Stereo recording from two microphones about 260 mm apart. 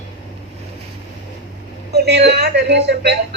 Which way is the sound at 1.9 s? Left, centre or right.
Right.